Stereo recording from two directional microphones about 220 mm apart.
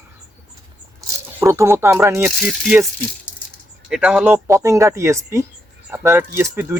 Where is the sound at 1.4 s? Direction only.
10° right (ahead or behind).